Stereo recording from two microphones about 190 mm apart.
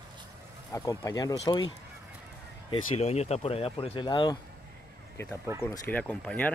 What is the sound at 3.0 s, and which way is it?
Speech, 35° left (ahead or behind).